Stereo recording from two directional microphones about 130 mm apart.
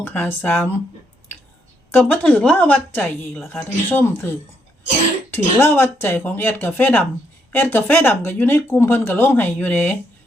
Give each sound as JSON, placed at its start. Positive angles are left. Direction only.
{"t": 0.1, "sound": "speech", "side_deg": 15}
{"t": 1.9, "sound": "speech", "side_deg": 15}